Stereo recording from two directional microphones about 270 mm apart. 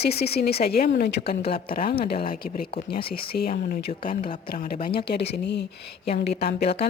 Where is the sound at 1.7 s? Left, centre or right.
Left.